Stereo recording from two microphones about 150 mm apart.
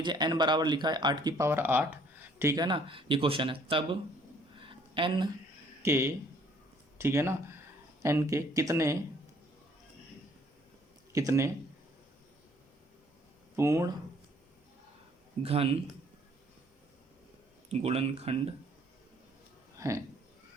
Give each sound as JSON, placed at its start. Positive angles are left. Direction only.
{"t": 0.0, "sound": "speech", "side_deg": -30}
{"t": 2.6, "sound": "speech", "side_deg": -35}
{"t": 4.5, "sound": "a sound", "side_deg": -35}
{"t": 5.8, "sound": "speech", "side_deg": -15}
{"t": 11.1, "sound": "speech", "side_deg": -20}
{"t": 13.6, "sound": "speech", "side_deg": -20}
{"t": 15.4, "sound": "speech", "side_deg": -40}
{"t": 17.7, "sound": "speech", "side_deg": -45}
{"t": 19.7, "sound": "a sound", "side_deg": -20}